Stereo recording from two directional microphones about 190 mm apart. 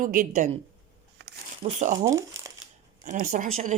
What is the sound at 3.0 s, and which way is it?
Speech, 40° right (ahead or behind).